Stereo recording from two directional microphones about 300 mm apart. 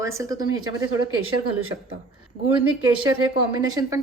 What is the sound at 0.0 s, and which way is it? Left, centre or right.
Speech, centre.